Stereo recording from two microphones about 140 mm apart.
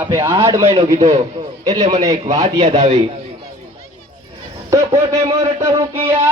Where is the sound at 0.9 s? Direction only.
55° right (ahead or behind).